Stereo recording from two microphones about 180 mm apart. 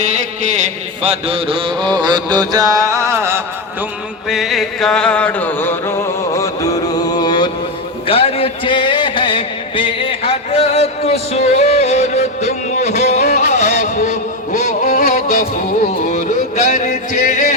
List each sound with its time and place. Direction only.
0.0 s mantra: 40° right (ahead or behind); by 3.4 s 15° right (ahead or behind)
4.3 s music: centre (ahead or behind); by 7.5 s 25° left (ahead or behind)
8.0 s a sound: 30° left (ahead or behind)